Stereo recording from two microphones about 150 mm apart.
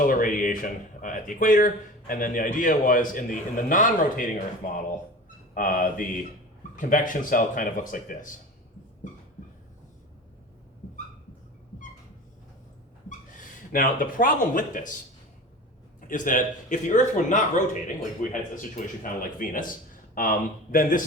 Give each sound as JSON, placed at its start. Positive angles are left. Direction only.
{"t": 0.0, "sound": "speech", "side_deg": 65}
{"t": 13.1, "sound": "speech", "side_deg": 60}
{"t": 16.0, "sound": "speech", "side_deg": 65}